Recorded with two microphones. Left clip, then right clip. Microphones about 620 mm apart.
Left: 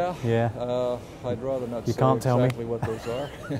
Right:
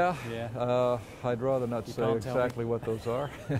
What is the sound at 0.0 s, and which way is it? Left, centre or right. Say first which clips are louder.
Speech: left 4 dB; right.